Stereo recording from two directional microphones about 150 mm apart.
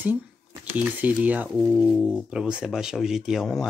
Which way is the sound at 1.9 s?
5° left (ahead or behind).